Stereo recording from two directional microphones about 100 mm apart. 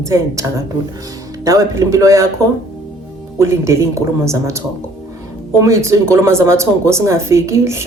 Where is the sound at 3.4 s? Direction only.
30° right (ahead or behind).